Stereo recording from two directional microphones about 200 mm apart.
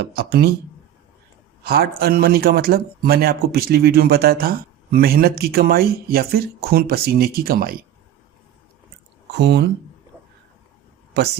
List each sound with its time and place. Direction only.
0.0 s speech: 55° right (ahead or behind)
1.6 s speech: 50° right (ahead or behind)
9.4 s speech: 55° right (ahead or behind)
11.2 s speech: 55° right (ahead or behind)